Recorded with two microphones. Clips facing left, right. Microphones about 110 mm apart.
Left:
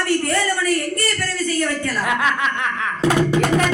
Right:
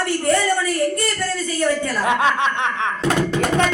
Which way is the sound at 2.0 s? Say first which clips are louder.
Right 3 dB; 25° right (ahead or behind).